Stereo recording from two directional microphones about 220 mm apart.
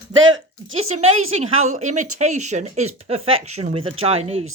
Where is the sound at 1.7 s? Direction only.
35° right (ahead or behind).